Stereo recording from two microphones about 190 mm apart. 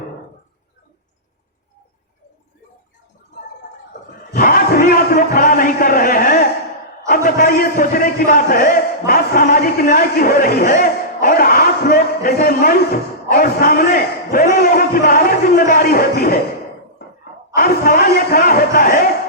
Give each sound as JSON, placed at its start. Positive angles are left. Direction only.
{"t": 4.3, "sound": "a sound", "side_deg": 50}
{"t": 7.1, "sound": "a man's voice", "side_deg": 50}
{"t": 17.6, "sound": "speech", "side_deg": 50}